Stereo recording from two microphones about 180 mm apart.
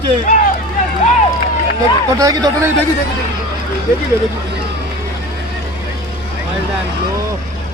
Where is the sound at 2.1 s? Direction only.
20° right (ahead or behind).